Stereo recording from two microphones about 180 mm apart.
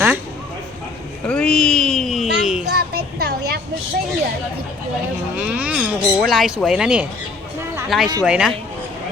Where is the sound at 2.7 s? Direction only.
65° right (ahead or behind).